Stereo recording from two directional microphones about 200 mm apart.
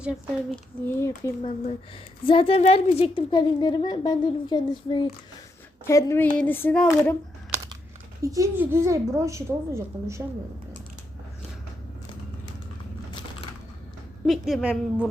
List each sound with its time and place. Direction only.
0.9 s speech: 15° left (ahead or behind)
1.4 s a child's voice: 30° left (ahead or behind); by 7.2 s 10° left (ahead or behind)
8.2 s a woman's voice: 15° right (ahead or behind)
14.3 s a woman's voice: centre (ahead or behind)